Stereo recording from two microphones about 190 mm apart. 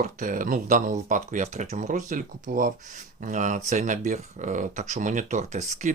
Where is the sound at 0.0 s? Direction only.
45° right (ahead or behind).